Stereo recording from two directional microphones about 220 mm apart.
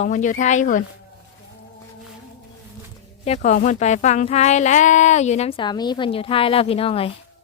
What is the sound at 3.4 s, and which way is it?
Speech, 35° left (ahead or behind).